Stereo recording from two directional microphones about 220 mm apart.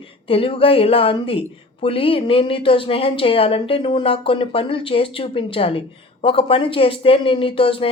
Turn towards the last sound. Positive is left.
turn(degrees=25)  # may be behind; listen again after turning